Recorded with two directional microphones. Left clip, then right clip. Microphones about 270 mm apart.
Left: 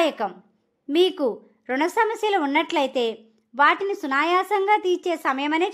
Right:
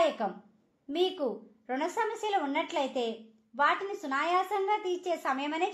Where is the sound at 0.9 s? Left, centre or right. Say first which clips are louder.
Left 10 dB; left.